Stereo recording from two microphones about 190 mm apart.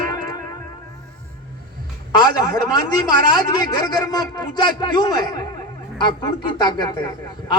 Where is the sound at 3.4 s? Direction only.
20° left (ahead or behind).